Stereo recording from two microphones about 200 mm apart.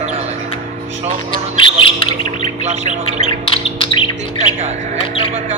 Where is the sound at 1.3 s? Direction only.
25° left (ahead or behind).